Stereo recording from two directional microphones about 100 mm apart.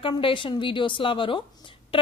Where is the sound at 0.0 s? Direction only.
55° left (ahead or behind).